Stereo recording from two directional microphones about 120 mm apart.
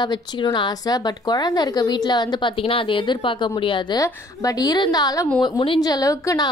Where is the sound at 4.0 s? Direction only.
30° left (ahead or behind).